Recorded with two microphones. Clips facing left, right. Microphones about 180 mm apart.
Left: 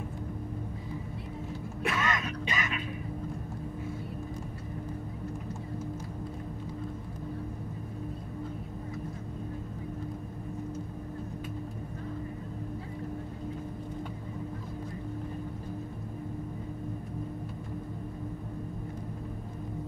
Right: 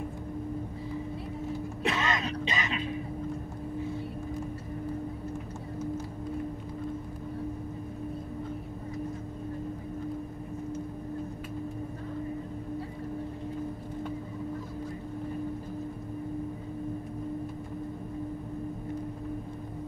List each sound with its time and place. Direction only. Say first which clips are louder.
1.8 s music: right 1 dB; 25° right (ahead or behind)